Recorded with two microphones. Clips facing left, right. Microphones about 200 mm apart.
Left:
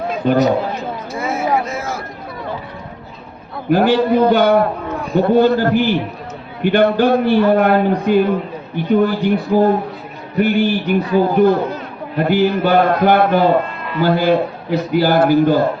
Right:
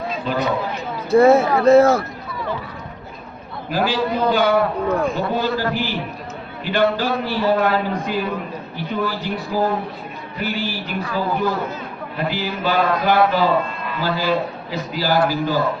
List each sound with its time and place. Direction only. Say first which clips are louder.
0.1 s a sound: left 9 dB; 45° left (ahead or behind)
1.1 s speech: right 7 dB; 60° right (ahead or behind)
3.7 s a man's voice: left 8 dB; 60° left (ahead or behind)